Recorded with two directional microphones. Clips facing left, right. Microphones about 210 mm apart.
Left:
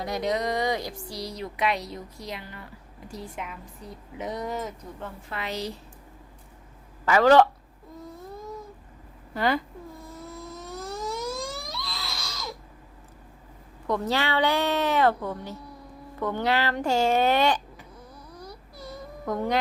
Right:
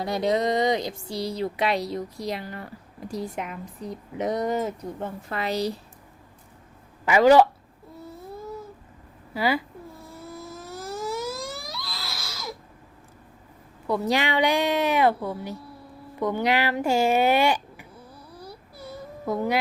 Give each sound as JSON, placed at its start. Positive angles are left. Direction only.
{"t": 0.0, "sound": "speech", "side_deg": -30}
{"t": 4.2, "sound": "a woman's voice", "side_deg": -40}
{"t": 7.0, "sound": "speech", "side_deg": -15}
{"t": 9.3, "sound": "speech", "side_deg": -5}
{"t": 10.3, "sound": "a sound", "side_deg": -5}
{"t": 13.8, "sound": "speech", "side_deg": -10}
{"t": 18.3, "sound": "baby cry", "side_deg": -10}